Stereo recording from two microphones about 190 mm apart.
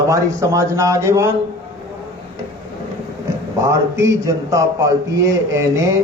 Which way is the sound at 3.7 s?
15° right (ahead or behind).